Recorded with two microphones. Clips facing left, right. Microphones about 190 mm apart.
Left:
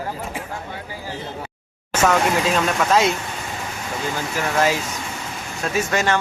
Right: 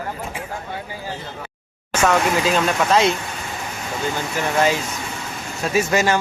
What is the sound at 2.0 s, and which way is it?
Speech, centre (ahead or behind).